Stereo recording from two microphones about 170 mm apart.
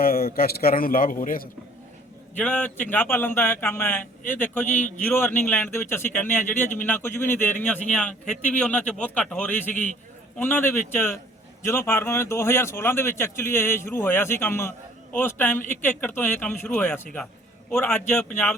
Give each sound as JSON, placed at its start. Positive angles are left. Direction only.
{"t": 0.0, "sound": "a man's voice", "side_deg": 60}
{"t": 2.4, "sound": "a man's voice", "side_deg": 5}